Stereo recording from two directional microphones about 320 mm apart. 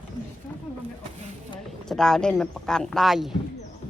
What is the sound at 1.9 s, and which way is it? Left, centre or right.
Speech, centre.